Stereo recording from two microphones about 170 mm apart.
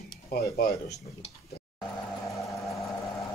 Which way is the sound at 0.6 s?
65° left (ahead or behind).